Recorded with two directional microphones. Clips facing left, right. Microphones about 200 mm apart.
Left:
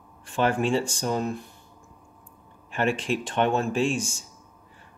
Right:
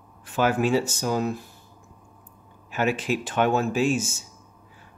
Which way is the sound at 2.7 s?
5° right (ahead or behind).